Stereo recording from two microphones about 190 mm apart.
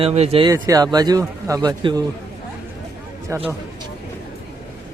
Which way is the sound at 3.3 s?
15° right (ahead or behind).